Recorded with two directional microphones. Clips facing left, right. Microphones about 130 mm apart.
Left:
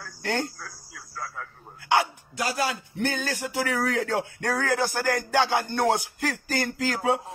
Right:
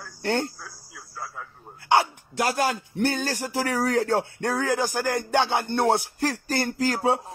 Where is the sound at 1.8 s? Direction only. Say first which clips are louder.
Right 2 dB; 35° right (ahead or behind).